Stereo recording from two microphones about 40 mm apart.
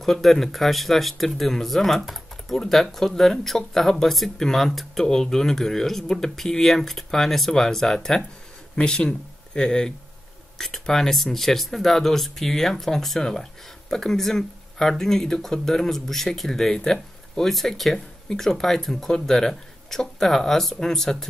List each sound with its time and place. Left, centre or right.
0.0 s speech: centre